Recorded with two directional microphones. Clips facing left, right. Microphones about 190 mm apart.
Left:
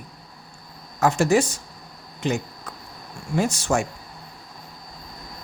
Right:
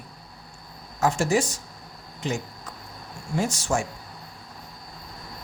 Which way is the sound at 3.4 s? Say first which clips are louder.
Left 3 dB; 65° left (ahead or behind).